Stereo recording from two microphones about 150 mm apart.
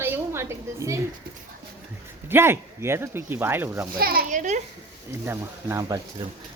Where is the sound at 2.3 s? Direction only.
15° right (ahead or behind).